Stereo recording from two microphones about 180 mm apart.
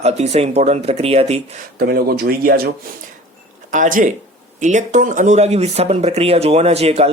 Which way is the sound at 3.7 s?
45° right (ahead or behind).